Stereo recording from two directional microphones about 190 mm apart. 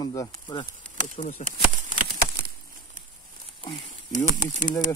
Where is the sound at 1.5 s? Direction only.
40° right (ahead or behind).